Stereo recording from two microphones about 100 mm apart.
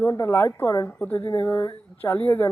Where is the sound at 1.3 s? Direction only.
30° left (ahead or behind).